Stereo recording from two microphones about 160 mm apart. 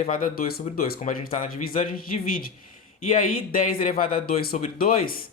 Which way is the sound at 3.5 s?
60° left (ahead or behind).